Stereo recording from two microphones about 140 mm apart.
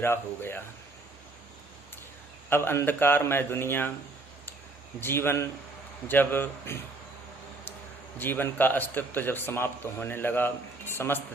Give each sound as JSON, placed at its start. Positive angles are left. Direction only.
{"t": 0.0, "sound": "a man's voice", "side_deg": 15}
{"t": 2.5, "sound": "a man's voice", "side_deg": 15}
{"t": 4.9, "sound": "a man's voice", "side_deg": 15}
{"t": 8.2, "sound": "a man's voice", "side_deg": 15}